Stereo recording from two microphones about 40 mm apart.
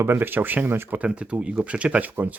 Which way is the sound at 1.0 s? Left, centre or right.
Right.